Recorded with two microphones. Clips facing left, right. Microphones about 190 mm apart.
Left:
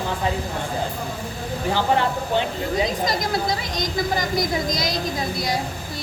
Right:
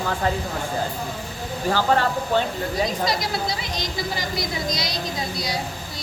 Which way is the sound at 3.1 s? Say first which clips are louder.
Left 2 dB; 45° left (ahead or behind).